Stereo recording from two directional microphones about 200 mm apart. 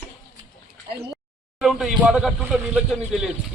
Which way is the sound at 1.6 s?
Centre (ahead or behind).